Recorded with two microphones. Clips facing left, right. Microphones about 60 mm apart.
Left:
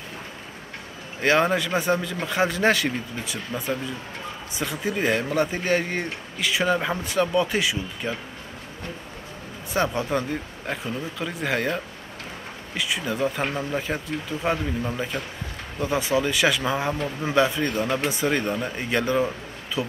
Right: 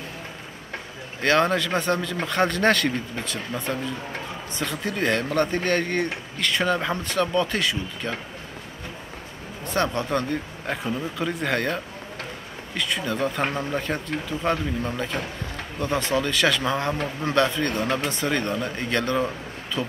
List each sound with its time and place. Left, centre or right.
1.2 s speech: centre
9.7 s speech: centre